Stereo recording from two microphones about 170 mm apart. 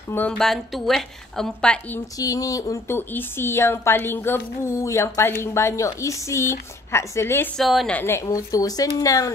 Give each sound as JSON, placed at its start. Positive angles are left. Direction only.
{"t": 0.1, "sound": "a woman's voice", "side_deg": 5}
{"t": 2.1, "sound": "speech", "side_deg": 20}
{"t": 7.5, "sound": "speech", "side_deg": 0}